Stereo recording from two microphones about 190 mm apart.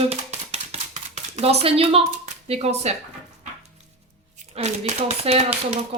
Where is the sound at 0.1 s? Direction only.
35° right (ahead or behind).